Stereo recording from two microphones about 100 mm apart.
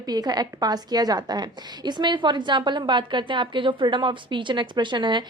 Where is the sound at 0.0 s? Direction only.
40° right (ahead or behind).